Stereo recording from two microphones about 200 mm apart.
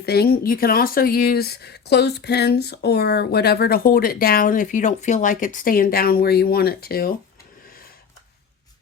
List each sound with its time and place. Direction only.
0.0 s speech: 50° left (ahead or behind)